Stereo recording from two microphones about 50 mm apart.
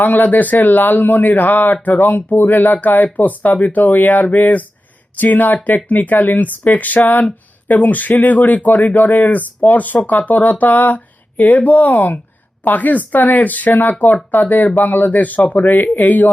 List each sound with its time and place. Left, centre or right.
0.0 s speech: left